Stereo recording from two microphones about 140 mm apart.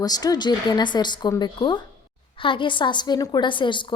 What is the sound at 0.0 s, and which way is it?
A woman's voice, 25° left (ahead or behind).